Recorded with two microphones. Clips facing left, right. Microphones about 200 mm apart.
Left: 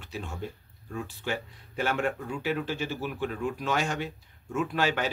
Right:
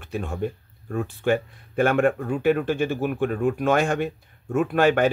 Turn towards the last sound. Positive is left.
turn(degrees=-55)  # may be behind; listen again after turning